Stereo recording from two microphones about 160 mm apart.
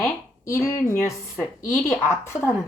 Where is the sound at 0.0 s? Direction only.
15° left (ahead or behind).